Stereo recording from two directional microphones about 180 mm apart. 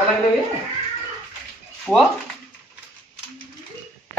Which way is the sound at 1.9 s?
Centre (ahead or behind).